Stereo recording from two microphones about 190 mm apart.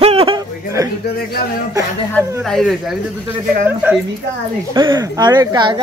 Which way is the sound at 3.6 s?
10° right (ahead or behind).